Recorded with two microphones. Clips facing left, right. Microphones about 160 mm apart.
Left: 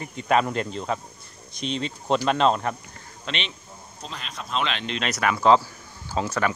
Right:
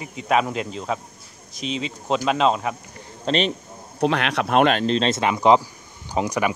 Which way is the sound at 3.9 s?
75° right (ahead or behind).